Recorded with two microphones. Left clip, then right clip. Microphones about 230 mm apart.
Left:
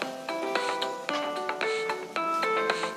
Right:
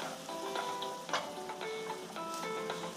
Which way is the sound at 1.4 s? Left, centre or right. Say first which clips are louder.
Left 11 dB; left.